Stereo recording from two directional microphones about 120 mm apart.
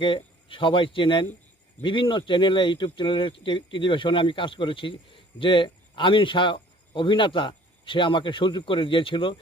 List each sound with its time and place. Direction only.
0.0 s speech: 45° left (ahead or behind)